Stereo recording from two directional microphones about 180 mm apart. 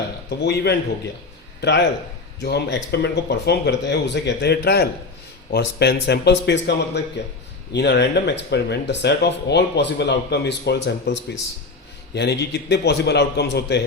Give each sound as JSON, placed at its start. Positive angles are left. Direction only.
{"t": 0.3, "sound": "a man's voice", "side_deg": 65}
{"t": 2.4, "sound": "speech", "side_deg": 65}